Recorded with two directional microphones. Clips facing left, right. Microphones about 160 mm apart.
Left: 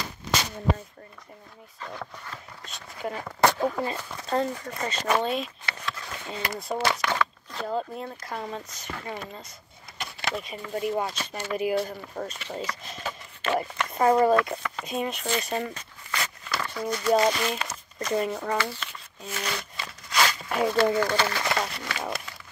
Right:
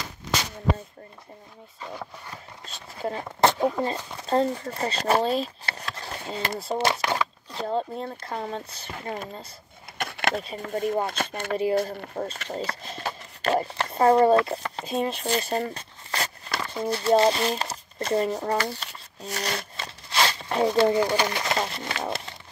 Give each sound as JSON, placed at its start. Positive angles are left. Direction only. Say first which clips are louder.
{"t": 1.8, "sound": "speech", "louder": "right 1 dB", "side_deg": -10}
{"t": 2.6, "sound": "speech", "louder": "right 3 dB", "side_deg": -30}
{"t": 3.3, "sound": "speech", "louder": "right 1 dB", "side_deg": -20}
{"t": 3.9, "sound": "speech", "louder": "right 3 dB", "side_deg": -30}
{"t": 9.9, "sound": "a sound", "louder": "right 5 dB", "side_deg": -60}
{"t": 10.4, "sound": "speech", "louder": "right 2 dB", "side_deg": -40}
{"t": 11.5, "sound": "speech", "louder": "right 2 dB", "side_deg": -30}